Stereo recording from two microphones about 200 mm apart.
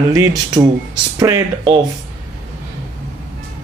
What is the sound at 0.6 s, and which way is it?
A man's voice, 20° right (ahead or behind).